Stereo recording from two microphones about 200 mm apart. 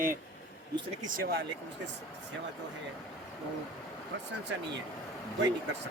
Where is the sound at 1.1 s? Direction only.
50° right (ahead or behind).